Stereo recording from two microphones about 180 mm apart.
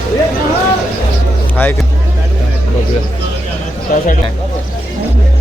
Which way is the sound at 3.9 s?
55° left (ahead or behind).